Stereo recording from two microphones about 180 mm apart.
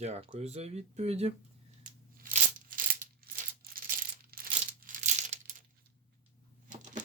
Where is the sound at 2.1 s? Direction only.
50° right (ahead or behind).